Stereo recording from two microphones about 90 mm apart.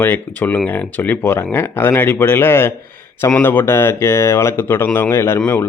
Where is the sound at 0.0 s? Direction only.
20° left (ahead or behind).